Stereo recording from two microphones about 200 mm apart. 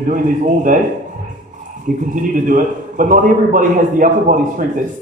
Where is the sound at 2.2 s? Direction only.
45° right (ahead or behind).